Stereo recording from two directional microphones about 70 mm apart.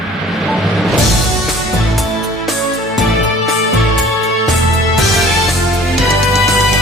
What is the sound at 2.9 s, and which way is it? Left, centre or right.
Music, centre.